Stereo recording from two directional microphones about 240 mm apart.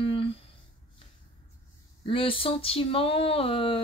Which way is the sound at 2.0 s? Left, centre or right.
Left.